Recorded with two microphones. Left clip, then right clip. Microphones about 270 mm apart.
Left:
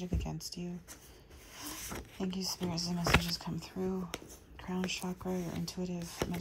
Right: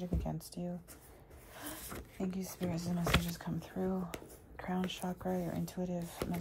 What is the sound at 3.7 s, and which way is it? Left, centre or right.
Speech, centre.